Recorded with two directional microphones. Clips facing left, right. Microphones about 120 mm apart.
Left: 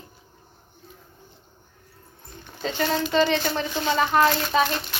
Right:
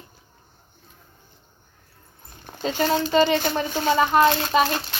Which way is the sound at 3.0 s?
30° right (ahead or behind).